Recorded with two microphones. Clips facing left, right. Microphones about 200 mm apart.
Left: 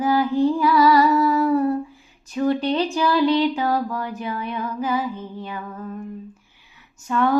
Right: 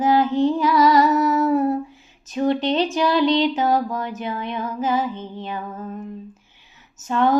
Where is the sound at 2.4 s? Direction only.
20° right (ahead or behind).